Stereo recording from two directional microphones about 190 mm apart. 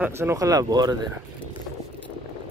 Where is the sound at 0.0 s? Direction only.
15° right (ahead or behind).